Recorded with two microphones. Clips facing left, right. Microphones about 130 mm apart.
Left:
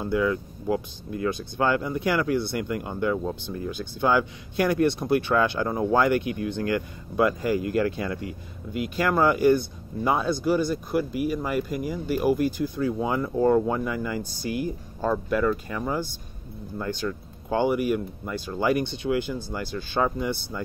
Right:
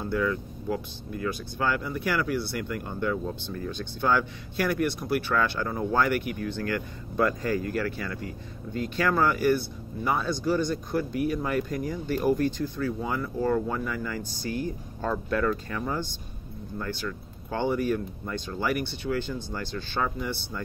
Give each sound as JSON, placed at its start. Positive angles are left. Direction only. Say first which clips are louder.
{"t": 0.0, "sound": "speech", "louder": "left 3 dB", "side_deg": 15}